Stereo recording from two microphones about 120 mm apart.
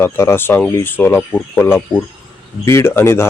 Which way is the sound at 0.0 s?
20° left (ahead or behind).